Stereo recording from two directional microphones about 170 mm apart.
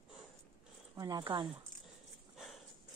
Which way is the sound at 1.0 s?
20° right (ahead or behind).